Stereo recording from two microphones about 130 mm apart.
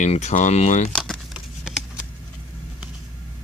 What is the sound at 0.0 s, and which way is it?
Speech, 60° left (ahead or behind).